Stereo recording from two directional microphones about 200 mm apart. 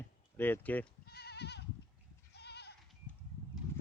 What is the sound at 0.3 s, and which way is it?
Speech, 10° left (ahead or behind).